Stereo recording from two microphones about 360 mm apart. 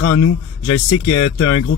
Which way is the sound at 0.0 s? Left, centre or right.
Left.